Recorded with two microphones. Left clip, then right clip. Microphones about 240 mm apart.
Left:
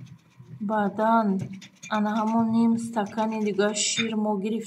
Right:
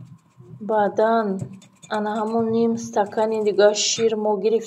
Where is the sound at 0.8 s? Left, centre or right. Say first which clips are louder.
Right 4 dB; centre.